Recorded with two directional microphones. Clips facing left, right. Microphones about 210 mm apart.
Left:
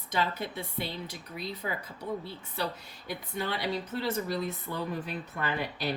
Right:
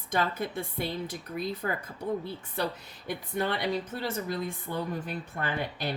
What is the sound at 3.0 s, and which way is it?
Speech, 50° right (ahead or behind).